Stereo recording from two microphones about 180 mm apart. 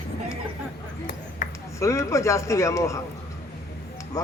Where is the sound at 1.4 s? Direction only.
45° left (ahead or behind).